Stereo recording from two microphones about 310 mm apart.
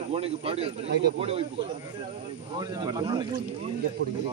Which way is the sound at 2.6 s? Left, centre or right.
Centre.